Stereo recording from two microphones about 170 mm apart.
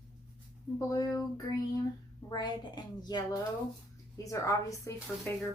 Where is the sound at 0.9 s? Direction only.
20° left (ahead or behind).